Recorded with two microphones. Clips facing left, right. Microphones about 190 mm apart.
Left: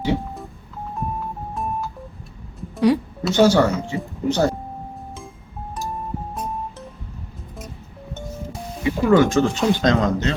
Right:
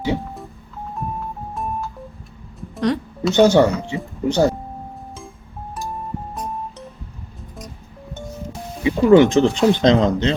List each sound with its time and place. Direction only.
1.5 s music: centre (ahead or behind)
3.3 s speech: 15° right (ahead or behind)
8.8 s speech: 20° right (ahead or behind)